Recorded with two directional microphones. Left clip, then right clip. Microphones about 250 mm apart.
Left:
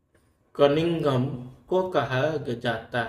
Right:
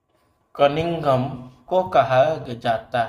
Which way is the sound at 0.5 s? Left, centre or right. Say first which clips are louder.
Right 2 dB; centre.